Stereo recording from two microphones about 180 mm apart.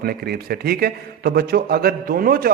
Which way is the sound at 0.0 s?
55° right (ahead or behind).